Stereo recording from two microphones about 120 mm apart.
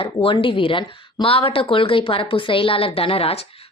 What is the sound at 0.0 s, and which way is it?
Speech, 45° left (ahead or behind).